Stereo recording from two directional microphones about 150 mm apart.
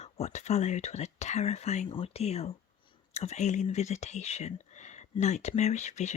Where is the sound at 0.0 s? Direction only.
50° left (ahead or behind).